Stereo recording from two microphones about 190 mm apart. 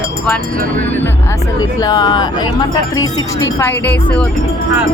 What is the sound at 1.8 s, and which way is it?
Speech, 20° left (ahead or behind).